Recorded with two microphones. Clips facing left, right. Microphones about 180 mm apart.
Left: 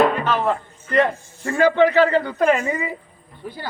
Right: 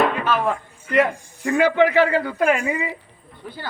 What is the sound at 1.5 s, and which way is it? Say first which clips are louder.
Speech: left 1 dB; 10° right (ahead or behind).